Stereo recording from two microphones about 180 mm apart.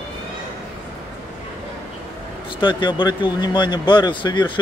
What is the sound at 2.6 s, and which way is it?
Speech, 25° left (ahead or behind).